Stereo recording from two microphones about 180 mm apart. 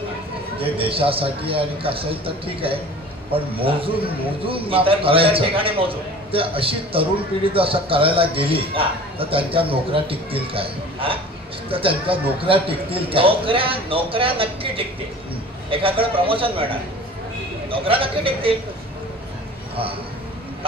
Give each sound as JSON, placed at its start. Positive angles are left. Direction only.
{"t": 0.6, "sound": "a man's voice", "side_deg": -30}